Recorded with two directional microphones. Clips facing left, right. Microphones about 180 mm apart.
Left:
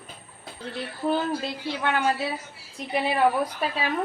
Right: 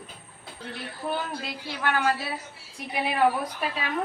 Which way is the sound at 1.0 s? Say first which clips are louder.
Left 6 dB; 25° left (ahead or behind).